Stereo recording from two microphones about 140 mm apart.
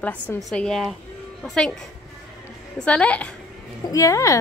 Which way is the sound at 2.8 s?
10° left (ahead or behind).